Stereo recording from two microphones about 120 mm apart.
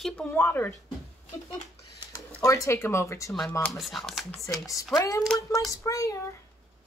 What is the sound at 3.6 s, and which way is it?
Speech, centre (ahead or behind).